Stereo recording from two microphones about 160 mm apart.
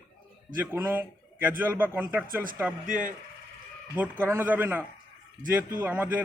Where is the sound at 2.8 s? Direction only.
55° right (ahead or behind).